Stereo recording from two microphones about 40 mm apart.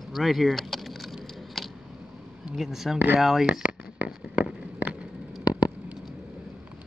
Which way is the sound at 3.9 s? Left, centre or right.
Right.